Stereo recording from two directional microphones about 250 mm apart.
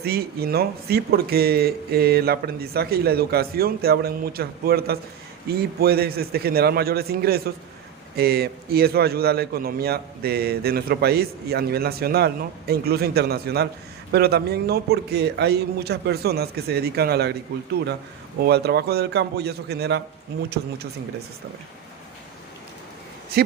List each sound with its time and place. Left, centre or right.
0.0 s a man's voice: right
18.4 s a man's voice: right